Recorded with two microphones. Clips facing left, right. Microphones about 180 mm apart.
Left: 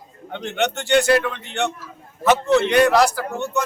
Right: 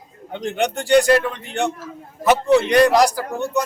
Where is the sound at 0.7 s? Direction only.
35° right (ahead or behind).